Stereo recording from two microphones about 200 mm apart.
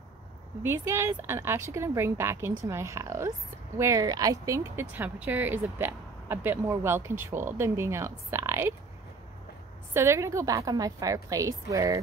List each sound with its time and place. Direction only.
0.6 s speech: 10° right (ahead or behind)
9.9 s speech: 15° right (ahead or behind)